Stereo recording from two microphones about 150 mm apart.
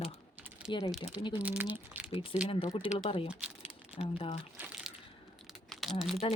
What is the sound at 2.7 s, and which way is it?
Speech, 30° left (ahead or behind).